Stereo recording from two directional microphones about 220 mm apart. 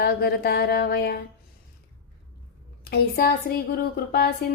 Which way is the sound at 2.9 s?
45° left (ahead or behind).